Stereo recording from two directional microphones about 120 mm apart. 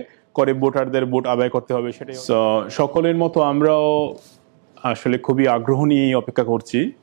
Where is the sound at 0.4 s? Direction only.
10° right (ahead or behind).